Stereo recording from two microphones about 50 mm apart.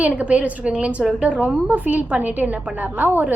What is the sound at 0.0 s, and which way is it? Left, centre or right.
A woman's voice, right.